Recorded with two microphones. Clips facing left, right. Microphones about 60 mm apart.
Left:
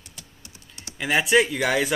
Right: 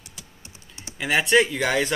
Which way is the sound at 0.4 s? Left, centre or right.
Right.